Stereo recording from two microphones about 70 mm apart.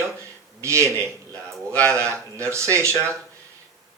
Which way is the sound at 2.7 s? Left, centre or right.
Right.